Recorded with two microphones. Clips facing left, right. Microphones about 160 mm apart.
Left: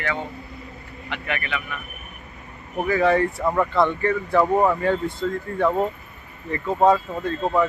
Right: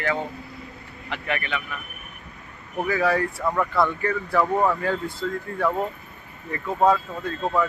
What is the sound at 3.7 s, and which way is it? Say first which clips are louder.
Speech: left 3 dB; 20° left (ahead or behind).